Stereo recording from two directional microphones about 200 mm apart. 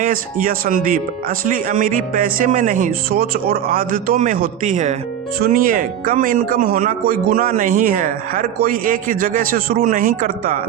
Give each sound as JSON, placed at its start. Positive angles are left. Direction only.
{"t": 0.0, "sound": "speech", "side_deg": -45}